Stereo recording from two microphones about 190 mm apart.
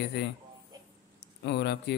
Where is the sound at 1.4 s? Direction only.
65° left (ahead or behind).